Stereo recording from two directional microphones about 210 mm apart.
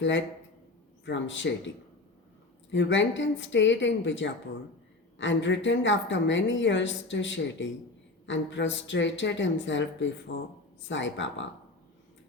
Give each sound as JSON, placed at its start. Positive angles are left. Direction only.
{"t": 1.0, "sound": "a woman's voice", "side_deg": 60}
{"t": 2.7, "sound": "a woman's voice", "side_deg": 60}